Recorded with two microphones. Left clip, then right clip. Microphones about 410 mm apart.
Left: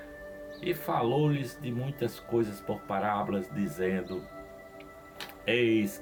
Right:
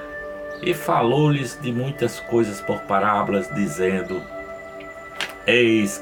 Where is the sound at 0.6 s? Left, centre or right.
Left.